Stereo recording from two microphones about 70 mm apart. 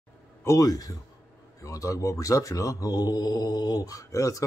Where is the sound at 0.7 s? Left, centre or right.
Left.